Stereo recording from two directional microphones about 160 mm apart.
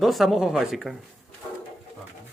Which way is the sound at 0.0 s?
Centre (ahead or behind).